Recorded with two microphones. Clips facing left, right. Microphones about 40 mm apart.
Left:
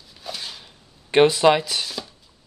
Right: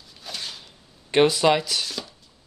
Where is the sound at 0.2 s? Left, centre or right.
Centre.